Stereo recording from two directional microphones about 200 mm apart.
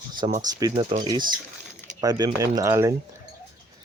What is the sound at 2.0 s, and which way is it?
Speech, 20° right (ahead or behind).